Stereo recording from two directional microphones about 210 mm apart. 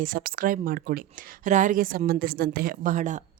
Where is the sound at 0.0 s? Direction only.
45° right (ahead or behind).